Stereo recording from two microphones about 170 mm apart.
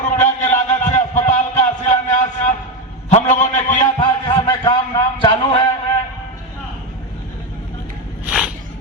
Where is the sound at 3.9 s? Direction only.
30° left (ahead or behind).